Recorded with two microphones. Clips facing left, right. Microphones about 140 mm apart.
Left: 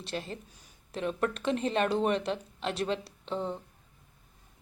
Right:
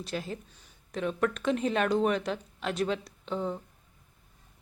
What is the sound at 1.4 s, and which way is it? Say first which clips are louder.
Speech: left 1 dB; centre (ahead or behind).